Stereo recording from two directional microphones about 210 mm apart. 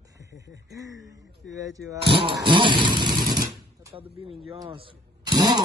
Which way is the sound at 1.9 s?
25° right (ahead or behind).